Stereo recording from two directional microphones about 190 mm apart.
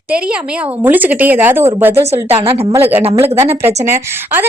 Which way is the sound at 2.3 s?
30° right (ahead or behind).